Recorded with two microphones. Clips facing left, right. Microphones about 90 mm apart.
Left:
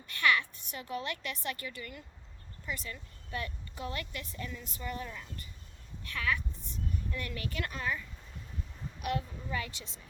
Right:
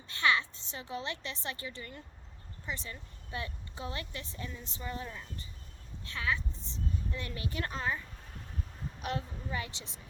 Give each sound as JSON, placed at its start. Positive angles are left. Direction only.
{"t": 0.1, "sound": "a woman's voice", "side_deg": -20}